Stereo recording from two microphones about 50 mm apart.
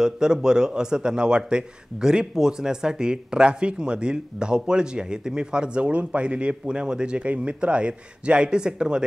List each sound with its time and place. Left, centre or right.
0.0 s a man's voice: centre